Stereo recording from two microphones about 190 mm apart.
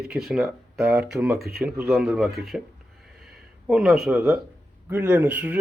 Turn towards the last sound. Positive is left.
turn(degrees=-10)  # may be behind; listen again after turning